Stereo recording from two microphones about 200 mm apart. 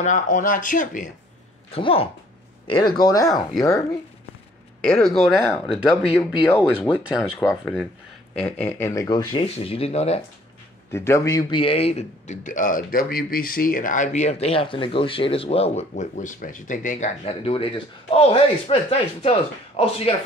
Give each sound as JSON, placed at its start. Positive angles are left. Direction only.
{"t": 0.0, "sound": "speech", "side_deg": 40}
{"t": 1.7, "sound": "speech", "side_deg": 30}
{"t": 3.3, "sound": "speech", "side_deg": 0}
{"t": 4.8, "sound": "speech", "side_deg": 5}
{"t": 6.9, "sound": "speech", "side_deg": -5}
{"t": 10.9, "sound": "speech", "side_deg": 15}